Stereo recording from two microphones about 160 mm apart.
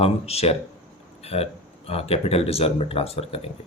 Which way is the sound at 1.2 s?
40° left (ahead or behind).